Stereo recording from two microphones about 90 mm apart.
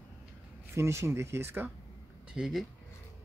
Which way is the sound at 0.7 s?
30° right (ahead or behind).